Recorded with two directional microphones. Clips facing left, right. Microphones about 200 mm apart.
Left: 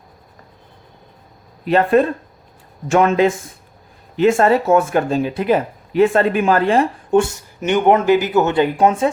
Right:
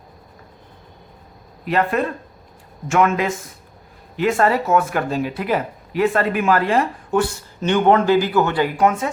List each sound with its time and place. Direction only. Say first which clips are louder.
1.6 s a man's voice: left 6 dB; 30° left (ahead or behind)